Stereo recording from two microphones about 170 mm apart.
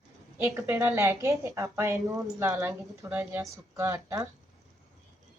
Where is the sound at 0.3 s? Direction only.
15° right (ahead or behind).